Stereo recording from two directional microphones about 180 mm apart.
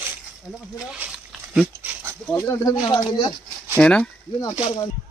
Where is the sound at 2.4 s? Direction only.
20° left (ahead or behind).